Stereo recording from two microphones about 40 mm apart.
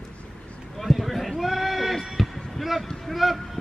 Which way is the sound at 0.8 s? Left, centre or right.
Centre.